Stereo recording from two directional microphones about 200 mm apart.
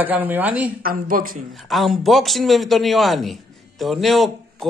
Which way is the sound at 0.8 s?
45° right (ahead or behind).